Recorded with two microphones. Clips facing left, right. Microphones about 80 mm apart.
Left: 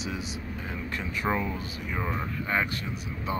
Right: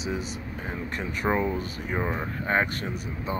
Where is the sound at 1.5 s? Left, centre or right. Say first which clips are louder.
Right 4 dB; right.